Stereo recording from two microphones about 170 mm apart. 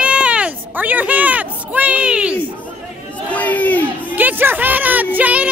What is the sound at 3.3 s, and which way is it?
Crowd, 10° left (ahead or behind).